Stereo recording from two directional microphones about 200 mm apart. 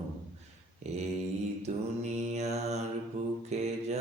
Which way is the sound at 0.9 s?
35° right (ahead or behind).